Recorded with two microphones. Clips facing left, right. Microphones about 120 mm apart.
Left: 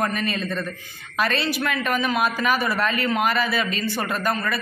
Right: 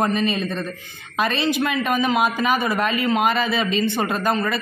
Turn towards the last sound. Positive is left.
turn(degrees=-20)  # may be behind; listen again after turning